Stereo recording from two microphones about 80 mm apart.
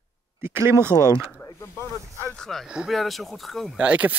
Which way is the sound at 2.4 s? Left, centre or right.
Centre.